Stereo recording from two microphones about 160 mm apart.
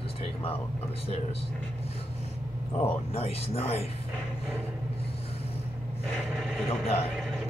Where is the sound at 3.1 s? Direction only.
40° left (ahead or behind).